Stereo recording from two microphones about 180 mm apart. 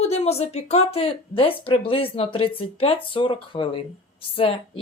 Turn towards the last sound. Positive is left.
turn(degrees=30)  # may be behind; listen again after turning